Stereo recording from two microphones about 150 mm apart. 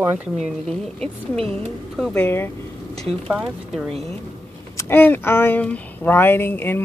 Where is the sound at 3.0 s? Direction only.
Centre (ahead or behind).